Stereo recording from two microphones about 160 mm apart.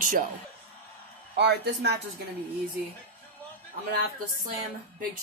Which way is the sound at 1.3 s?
90° right.